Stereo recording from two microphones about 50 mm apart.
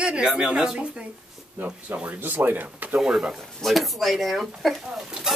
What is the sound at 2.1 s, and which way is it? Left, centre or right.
Speech, right.